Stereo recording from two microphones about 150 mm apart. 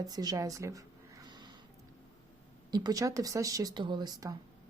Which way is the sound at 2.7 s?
25° right (ahead or behind).